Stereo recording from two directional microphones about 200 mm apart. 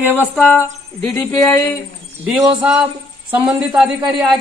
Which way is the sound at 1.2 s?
15° left (ahead or behind).